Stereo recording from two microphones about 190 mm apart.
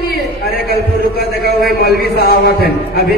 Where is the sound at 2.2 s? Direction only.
55° left (ahead or behind).